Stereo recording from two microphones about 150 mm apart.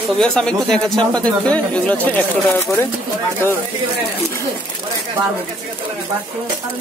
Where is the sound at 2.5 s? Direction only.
20° left (ahead or behind).